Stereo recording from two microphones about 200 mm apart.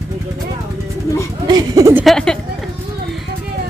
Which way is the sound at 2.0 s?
5° left (ahead or behind).